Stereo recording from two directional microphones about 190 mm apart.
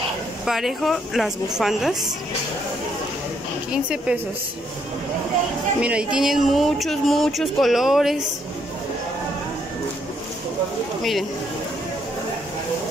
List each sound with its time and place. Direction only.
0.5 s speech: centre (ahead or behind)
3.7 s speech: 5° right (ahead or behind)
5.8 s speech: 5° right (ahead or behind)
11.0 s speech: centre (ahead or behind)